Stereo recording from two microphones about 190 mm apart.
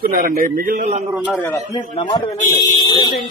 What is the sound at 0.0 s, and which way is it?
Speech, 50° right (ahead or behind).